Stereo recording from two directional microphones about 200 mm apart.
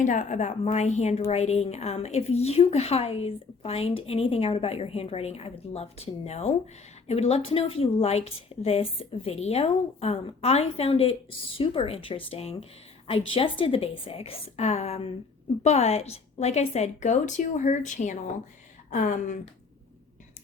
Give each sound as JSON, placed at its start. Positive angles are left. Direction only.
{"t": 0.0, "sound": "a woman's voice", "side_deg": 40}